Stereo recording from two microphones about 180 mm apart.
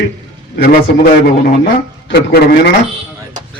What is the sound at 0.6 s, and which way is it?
A man's voice, 50° left (ahead or behind).